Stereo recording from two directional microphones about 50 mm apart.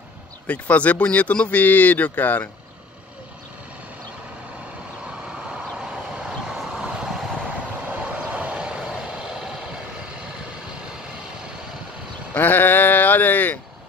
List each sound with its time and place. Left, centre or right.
0.5 s speech: left
6.1 s vehicle: centre
7.9 s vehicle: right
12.4 s speech: left